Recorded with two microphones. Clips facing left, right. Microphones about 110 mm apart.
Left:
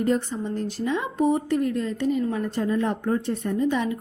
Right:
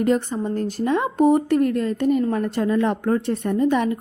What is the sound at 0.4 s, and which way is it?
Speech, 50° right (ahead or behind).